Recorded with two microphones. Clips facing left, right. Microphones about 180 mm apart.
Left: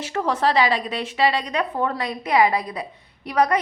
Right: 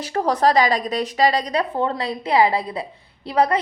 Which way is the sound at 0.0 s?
35° right (ahead or behind).